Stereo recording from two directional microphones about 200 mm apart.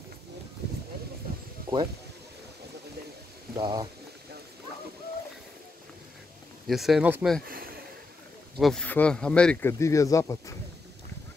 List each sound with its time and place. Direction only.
3.5 s speech: 20° right (ahead or behind)
6.7 s speech: centre (ahead or behind)
7.4 s speech: 45° right (ahead or behind)
8.5 s speech: centre (ahead or behind); by 10.5 s 15° left (ahead or behind)